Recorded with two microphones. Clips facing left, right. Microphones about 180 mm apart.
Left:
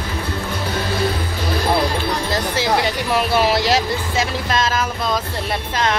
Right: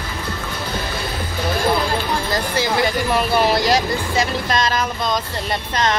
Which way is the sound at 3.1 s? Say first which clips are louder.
Left 2 dB; centre (ahead or behind).